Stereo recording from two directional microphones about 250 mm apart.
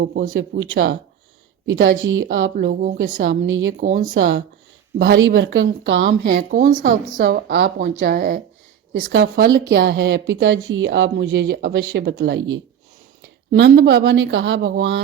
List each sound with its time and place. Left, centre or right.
0.0 s a woman's voice: right
2.8 s speech: right
3.2 s a woman's voice: right
3.9 s speech: right
4.2 s a woman's voice: right
6.3 s speech: right
9.0 s a woman's voice: right